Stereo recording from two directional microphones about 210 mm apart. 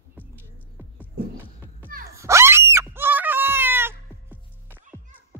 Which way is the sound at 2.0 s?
15° right (ahead or behind).